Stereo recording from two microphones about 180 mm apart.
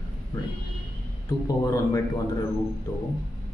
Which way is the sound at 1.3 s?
20° left (ahead or behind).